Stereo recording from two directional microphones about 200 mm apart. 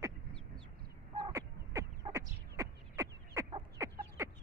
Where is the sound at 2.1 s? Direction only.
30° right (ahead or behind).